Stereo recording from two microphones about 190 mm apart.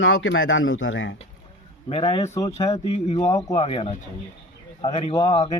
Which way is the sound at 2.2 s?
15° left (ahead or behind).